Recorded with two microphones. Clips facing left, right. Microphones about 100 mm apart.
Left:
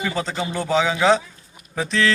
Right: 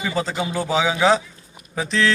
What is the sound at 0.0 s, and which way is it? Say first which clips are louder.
Speech: right 1 dB; 5° right (ahead or behind).